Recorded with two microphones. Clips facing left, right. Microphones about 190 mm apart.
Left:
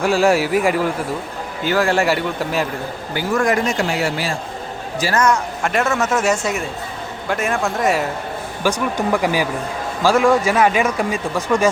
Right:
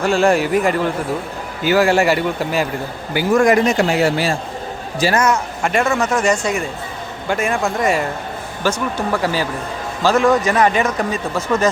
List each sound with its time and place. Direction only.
0.0 s a man's voice: 5° left (ahead or behind)
1.6 s speech: 5° right (ahead or behind)
3.4 s a man's voice: 20° right (ahead or behind)
5.1 s speech: 5° right (ahead or behind)
8.6 s a man's voice: 15° left (ahead or behind)